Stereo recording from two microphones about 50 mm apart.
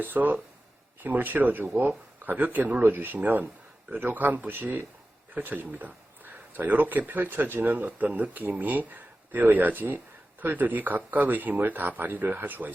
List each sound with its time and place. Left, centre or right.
0.0 s speech: right